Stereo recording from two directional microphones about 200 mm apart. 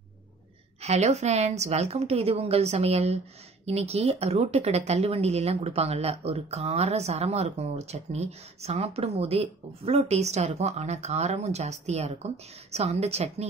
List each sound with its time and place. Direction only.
0.7 s speech: 35° right (ahead or behind)